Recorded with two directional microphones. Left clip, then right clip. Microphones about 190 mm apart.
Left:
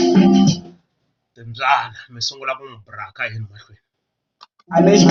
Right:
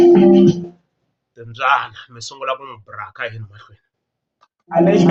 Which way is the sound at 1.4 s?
25° right (ahead or behind).